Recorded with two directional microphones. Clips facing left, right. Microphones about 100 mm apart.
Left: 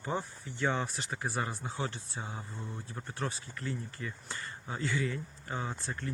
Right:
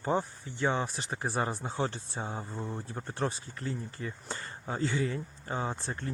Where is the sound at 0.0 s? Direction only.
30° right (ahead or behind).